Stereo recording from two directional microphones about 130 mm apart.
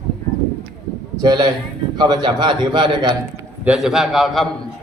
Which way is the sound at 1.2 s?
30° right (ahead or behind).